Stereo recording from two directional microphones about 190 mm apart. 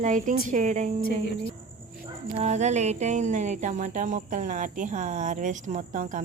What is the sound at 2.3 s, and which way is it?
Speech, 40° right (ahead or behind).